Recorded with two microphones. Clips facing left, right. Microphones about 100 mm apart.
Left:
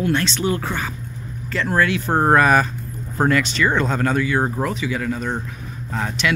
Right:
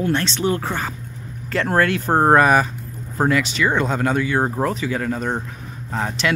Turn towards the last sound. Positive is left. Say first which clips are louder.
# even
turn(degrees=-30)  # may be behind; listen again after turning